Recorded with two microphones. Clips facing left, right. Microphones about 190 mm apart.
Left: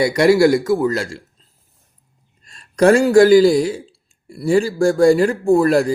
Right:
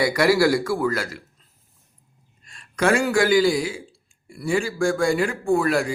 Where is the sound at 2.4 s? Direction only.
40° left (ahead or behind).